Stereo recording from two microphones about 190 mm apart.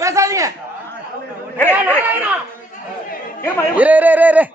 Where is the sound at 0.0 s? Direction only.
15° right (ahead or behind).